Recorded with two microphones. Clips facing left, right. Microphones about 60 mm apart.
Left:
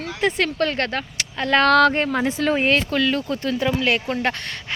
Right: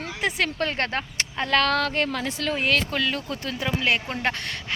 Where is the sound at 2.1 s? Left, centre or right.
Left.